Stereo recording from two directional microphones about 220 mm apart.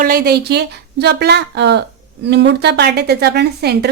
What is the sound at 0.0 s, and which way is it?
A woman's voice, 40° right (ahead or behind).